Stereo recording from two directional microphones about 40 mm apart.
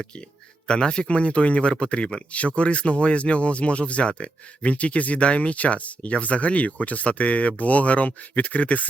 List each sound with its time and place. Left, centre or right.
0.7 s speech: left